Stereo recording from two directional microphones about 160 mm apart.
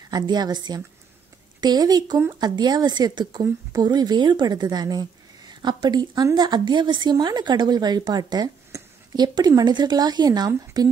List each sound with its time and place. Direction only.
0.1 s a woman's voice: 25° right (ahead or behind)